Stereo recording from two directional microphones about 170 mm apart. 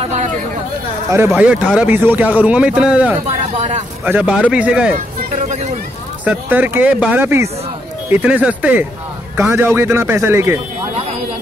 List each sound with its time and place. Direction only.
0.0 s a sound: 45° right (ahead or behind)
1.1 s a man's voice: 10° right (ahead or behind)
3.3 s speech: 40° right (ahead or behind)
4.0 s a man's voice: 10° right (ahead or behind)
6.2 s a man's voice: 10° right (ahead or behind)